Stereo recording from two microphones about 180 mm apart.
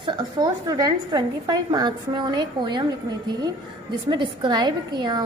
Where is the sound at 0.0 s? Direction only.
25° right (ahead or behind).